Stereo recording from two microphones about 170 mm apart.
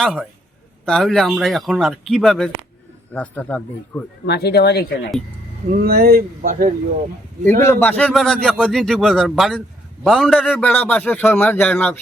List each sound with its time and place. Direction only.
0.0 s a man's voice: 5° left (ahead or behind)
4.3 s speech: 70° left (ahead or behind)
5.7 s speech: 60° right (ahead or behind)
7.6 s a man's voice: 15° left (ahead or behind)